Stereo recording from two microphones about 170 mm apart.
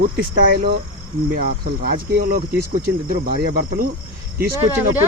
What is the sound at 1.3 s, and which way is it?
Speech, 60° right (ahead or behind).